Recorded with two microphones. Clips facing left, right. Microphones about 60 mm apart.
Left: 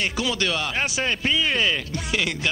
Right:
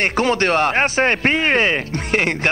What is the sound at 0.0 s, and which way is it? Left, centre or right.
Speech, right.